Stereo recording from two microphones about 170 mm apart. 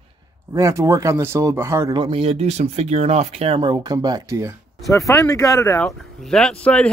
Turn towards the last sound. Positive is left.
turn(degrees=5)  # may be behind; listen again after turning